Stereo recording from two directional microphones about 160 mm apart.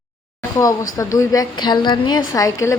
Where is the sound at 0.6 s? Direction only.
25° left (ahead or behind).